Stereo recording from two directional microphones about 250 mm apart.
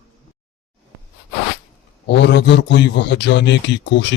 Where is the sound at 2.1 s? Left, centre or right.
Left.